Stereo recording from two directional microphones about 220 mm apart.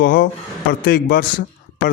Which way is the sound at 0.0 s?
40° left (ahead or behind).